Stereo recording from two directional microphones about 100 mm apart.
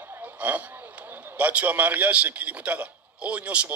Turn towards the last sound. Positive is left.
turn(degrees=-15)  # may be behind; listen again after turning